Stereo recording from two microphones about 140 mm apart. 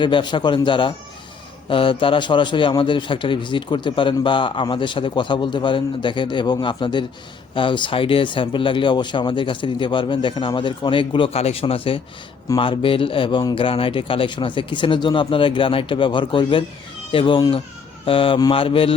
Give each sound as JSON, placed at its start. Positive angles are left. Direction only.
{"t": 0.0, "sound": "a man's voice", "side_deg": 35}